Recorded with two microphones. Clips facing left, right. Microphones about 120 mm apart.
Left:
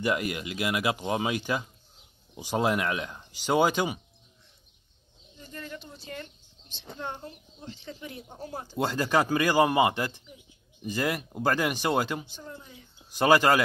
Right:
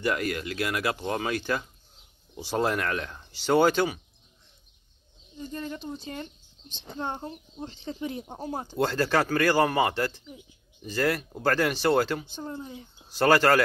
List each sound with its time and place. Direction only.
0.0 s speech: 15° left (ahead or behind)
5.4 s speech: 25° right (ahead or behind)
8.7 s speech: 10° left (ahead or behind)
12.3 s speech: 30° right (ahead or behind)
13.2 s speech: 15° left (ahead or behind)